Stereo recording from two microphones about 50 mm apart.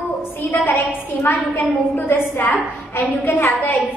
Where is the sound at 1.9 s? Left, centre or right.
Left.